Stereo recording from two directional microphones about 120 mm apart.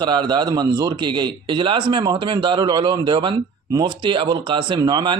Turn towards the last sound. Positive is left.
turn(degrees=-35)  # may be behind; listen again after turning